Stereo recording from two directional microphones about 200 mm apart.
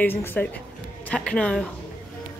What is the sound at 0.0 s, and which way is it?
Speech, 10° left (ahead or behind).